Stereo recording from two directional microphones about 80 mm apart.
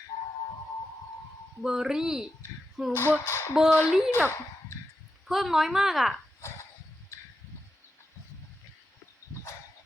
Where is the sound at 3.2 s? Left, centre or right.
Left.